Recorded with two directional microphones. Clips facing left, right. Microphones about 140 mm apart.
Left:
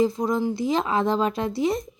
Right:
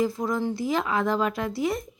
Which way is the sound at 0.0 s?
20° left (ahead or behind).